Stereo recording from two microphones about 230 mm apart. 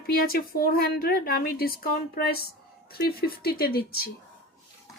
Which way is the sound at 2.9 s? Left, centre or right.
Left.